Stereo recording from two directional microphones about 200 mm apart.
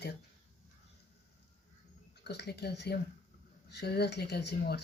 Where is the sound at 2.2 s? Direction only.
55° left (ahead or behind).